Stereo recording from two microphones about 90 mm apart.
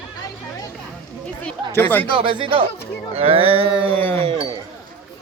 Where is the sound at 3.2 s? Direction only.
90° right.